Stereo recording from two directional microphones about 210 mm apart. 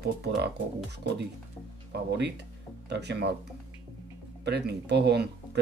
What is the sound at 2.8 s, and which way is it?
Speech, 55° right (ahead or behind).